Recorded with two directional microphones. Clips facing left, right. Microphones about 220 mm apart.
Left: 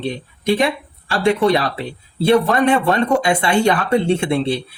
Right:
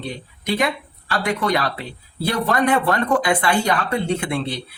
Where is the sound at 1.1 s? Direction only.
25° left (ahead or behind).